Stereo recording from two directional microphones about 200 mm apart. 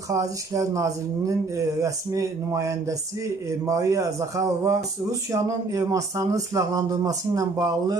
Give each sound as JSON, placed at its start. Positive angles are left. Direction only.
{"t": 0.1, "sound": "speech", "side_deg": -15}